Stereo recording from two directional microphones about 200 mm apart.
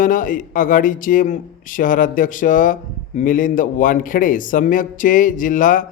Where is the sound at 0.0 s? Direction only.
40° left (ahead or behind).